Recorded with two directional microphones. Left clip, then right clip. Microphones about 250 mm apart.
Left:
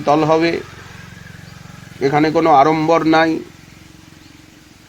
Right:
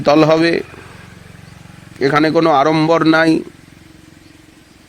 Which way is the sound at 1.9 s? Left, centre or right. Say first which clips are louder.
Right 2 dB; right.